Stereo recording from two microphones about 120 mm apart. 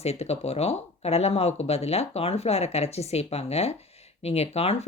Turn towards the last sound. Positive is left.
turn(degrees=60)  # may be behind; listen again after turning